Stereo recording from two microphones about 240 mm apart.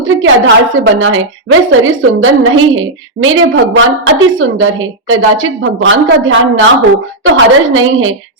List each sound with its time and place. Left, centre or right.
0.0 s a woman's voice: right